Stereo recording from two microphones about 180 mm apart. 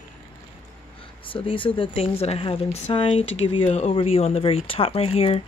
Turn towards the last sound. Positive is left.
turn(degrees=30)  # may be behind; listen again after turning